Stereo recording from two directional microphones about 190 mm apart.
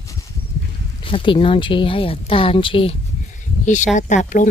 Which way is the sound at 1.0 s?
25° left (ahead or behind).